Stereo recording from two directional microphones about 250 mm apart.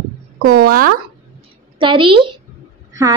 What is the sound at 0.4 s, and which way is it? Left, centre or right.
Music, right.